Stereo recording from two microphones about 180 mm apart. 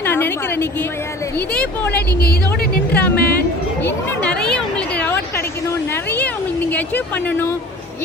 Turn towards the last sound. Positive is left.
turn(degrees=10)  # may be behind; listen again after turning